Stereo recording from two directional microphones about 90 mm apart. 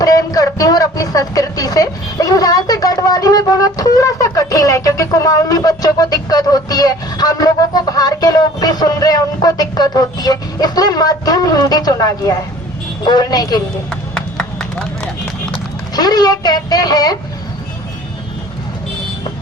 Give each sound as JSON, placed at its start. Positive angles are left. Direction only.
{"t": 0.0, "sound": "a sound", "side_deg": 45}
{"t": 13.1, "sound": "speech", "side_deg": 45}
{"t": 13.9, "sound": "run", "side_deg": 5}
{"t": 16.0, "sound": "speech", "side_deg": 45}